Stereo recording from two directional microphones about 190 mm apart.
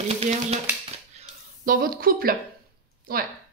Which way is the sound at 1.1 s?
45° right (ahead or behind).